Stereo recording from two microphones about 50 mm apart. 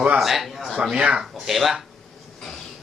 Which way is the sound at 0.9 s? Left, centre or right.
Right.